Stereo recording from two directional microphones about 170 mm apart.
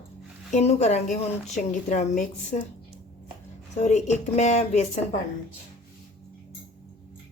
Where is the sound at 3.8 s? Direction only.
40° left (ahead or behind).